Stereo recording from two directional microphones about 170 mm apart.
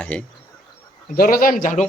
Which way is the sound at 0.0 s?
5° left (ahead or behind).